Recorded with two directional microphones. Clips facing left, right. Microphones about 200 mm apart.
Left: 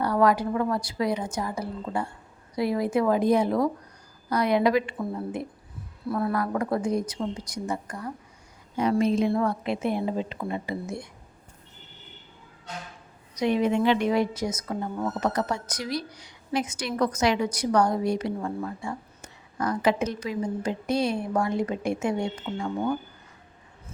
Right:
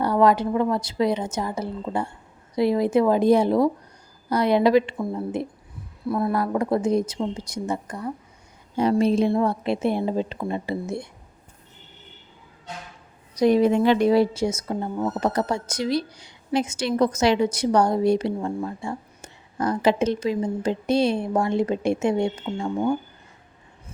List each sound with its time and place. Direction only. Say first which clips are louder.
0.0 s a woman's voice: right 3 dB; 25° right (ahead or behind)
13.4 s a woman's voice: right 5 dB; 40° right (ahead or behind)